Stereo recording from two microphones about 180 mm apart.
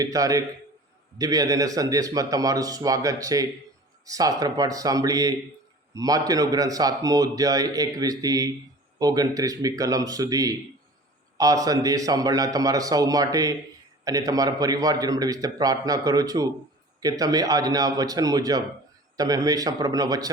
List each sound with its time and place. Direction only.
0.0 s a man's voice: 20° right (ahead or behind)